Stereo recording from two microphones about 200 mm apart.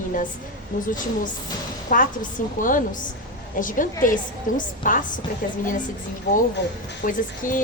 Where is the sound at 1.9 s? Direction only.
40° left (ahead or behind).